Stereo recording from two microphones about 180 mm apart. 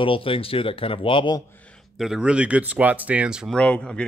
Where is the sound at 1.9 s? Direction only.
Centre (ahead or behind).